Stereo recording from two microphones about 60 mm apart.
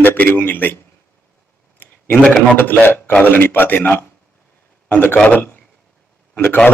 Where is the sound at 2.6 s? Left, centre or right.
Left.